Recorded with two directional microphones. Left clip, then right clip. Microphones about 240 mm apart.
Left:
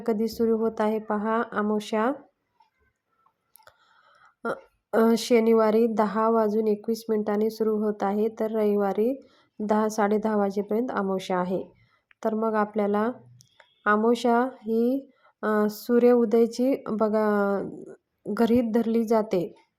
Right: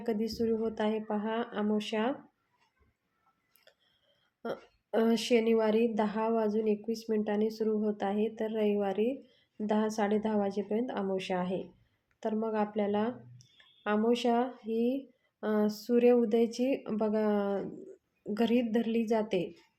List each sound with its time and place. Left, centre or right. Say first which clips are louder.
0.0 s speech: left 7 dB; left
4.4 s speech: left 8 dB; left